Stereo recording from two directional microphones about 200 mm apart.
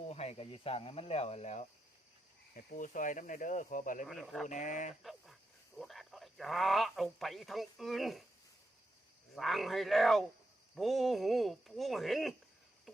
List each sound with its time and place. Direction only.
0.1 s speech: 30° left (ahead or behind)
4.1 s speech: centre (ahead or behind)
4.4 s speech: 40° left (ahead or behind)
5.0 s speech: centre (ahead or behind)
9.3 s speech: centre (ahead or behind)